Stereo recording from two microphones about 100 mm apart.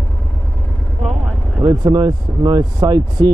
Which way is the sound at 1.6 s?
45° right (ahead or behind).